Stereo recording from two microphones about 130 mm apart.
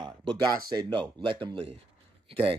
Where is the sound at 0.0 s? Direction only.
35° right (ahead or behind).